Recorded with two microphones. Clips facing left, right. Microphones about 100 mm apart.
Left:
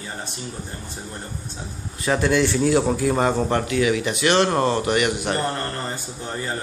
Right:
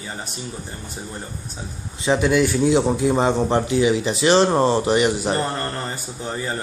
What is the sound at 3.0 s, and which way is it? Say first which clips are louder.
Speech: right 2 dB; 20° right (ahead or behind).